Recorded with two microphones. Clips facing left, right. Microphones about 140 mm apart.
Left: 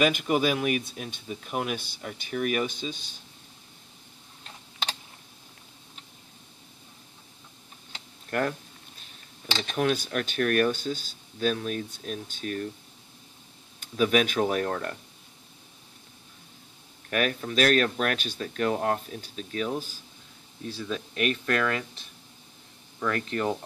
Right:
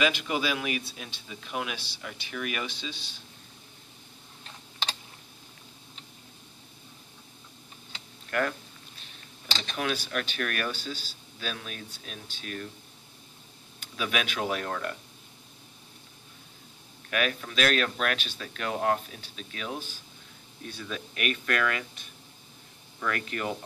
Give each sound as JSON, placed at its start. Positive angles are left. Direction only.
{"t": 0.0, "sound": "speech", "side_deg": 50}
{"t": 7.9, "sound": "computer keyboard", "side_deg": 35}
{"t": 9.8, "sound": "speech", "side_deg": 40}
{"t": 13.9, "sound": "speech", "side_deg": 40}
{"t": 17.1, "sound": "speech", "side_deg": 40}
{"t": 23.0, "sound": "speech", "side_deg": 30}